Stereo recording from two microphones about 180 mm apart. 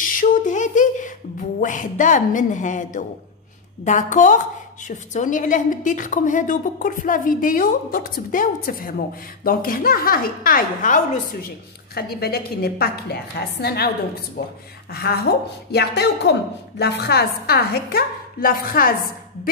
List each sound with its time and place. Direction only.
0.0 s a sound: 50° left (ahead or behind)
1.6 s a woman's voice: 45° left (ahead or behind)
11.9 s a woman's voice: 60° left (ahead or behind)